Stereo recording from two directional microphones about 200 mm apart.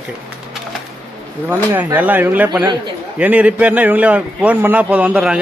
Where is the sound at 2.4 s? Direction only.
20° right (ahead or behind).